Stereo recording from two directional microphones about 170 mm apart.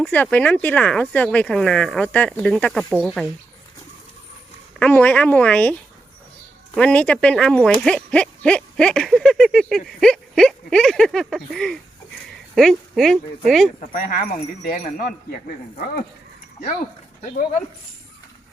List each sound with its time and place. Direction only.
0.1 s speech: 10° left (ahead or behind)
2.9 s speech: 5° right (ahead or behind)
4.8 s speech: 10° left (ahead or behind)
6.7 s speech: 5° left (ahead or behind)
12.3 s a sound: centre (ahead or behind)
13.0 s speech: centre (ahead or behind)
13.9 s speech: 55° left (ahead or behind)